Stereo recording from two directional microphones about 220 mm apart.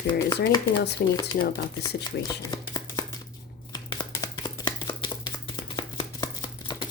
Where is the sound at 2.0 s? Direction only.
15° left (ahead or behind).